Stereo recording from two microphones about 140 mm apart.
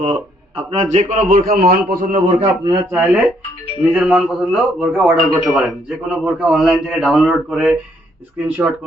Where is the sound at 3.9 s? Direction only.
5° right (ahead or behind).